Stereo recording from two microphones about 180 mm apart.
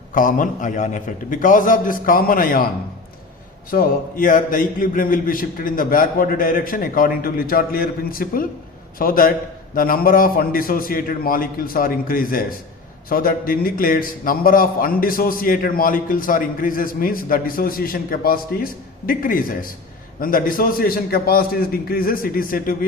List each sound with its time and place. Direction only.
0.1 s a man's voice: 45° left (ahead or behind)
3.7 s a man's voice: 50° left (ahead or behind)